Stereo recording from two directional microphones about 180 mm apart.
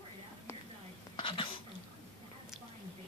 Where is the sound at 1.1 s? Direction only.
25° left (ahead or behind).